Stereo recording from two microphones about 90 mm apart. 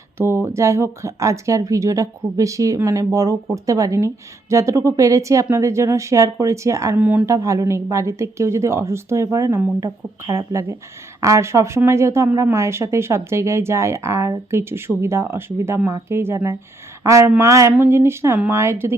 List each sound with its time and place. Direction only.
0.2 s speech: 30° right (ahead or behind)
6.9 s speech: 20° right (ahead or behind)
7.3 s a woman's voice: 35° right (ahead or behind)